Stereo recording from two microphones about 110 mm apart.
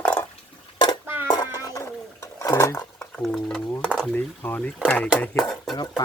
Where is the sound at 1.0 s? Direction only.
20° right (ahead or behind).